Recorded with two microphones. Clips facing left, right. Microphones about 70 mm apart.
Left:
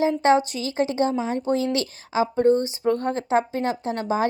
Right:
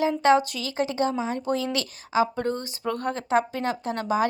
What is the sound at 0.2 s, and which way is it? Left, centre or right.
Speech, left.